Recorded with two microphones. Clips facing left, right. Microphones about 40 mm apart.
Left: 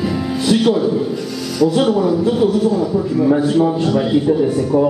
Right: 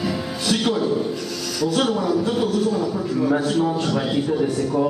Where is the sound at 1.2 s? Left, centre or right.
Centre.